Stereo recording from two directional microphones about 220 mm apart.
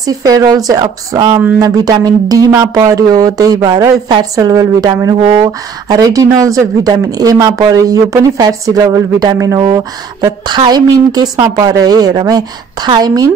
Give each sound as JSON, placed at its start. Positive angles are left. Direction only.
{"t": 0.0, "sound": "speech", "side_deg": -15}